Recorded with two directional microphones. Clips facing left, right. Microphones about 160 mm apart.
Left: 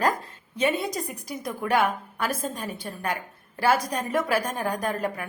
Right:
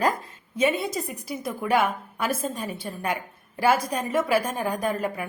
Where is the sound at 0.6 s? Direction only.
5° right (ahead or behind).